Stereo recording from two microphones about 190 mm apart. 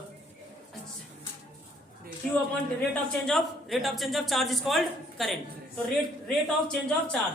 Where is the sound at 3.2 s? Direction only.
Centre (ahead or behind).